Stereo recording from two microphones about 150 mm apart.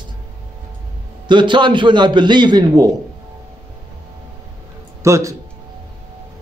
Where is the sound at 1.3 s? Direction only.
30° right (ahead or behind).